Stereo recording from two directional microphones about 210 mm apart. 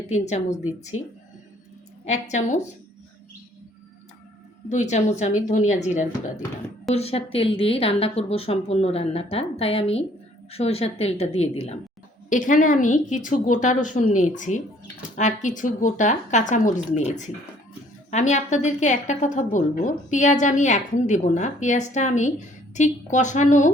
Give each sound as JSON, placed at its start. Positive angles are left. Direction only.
{"t": 0.1, "sound": "a woman's voice", "side_deg": 35}
{"t": 0.9, "sound": "speech", "side_deg": 85}
{"t": 2.0, "sound": "a woman's voice", "side_deg": 35}
{"t": 4.7, "sound": "a woman's voice", "side_deg": 35}